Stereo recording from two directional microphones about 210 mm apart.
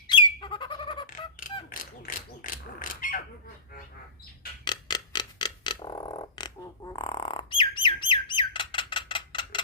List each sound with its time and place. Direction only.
0.1 s bird: 20° left (ahead or behind)
1.0 s a sound: 40° left (ahead or behind)
4.6 s clock: 20° left (ahead or behind)